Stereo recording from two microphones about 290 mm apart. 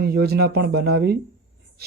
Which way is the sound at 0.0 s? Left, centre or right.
Right.